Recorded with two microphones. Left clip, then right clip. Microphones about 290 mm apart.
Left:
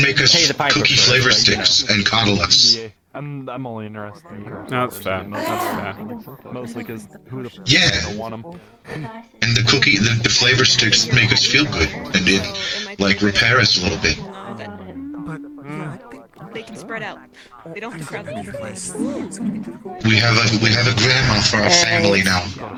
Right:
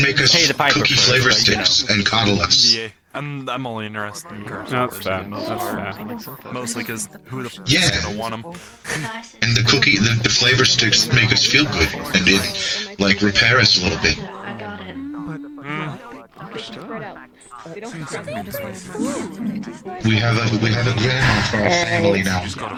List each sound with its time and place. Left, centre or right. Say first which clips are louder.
0.0 s a man's voice: left 1 dB; centre
2.8 s speech: right 4 dB; right
4.7 s a man's voice: even; centre
6.5 s speech: right 4 dB; right
7.7 s a man's voice: left 2 dB; centre
8.9 s speech: right 6 dB; right
9.4 s a man's voice: even; centre
20.0 s a man's voice: left 4 dB; centre